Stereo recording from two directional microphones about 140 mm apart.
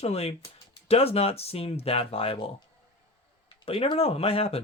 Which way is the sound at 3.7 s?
45° left (ahead or behind).